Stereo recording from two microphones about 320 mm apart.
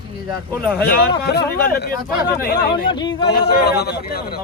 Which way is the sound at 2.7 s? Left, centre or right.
Centre.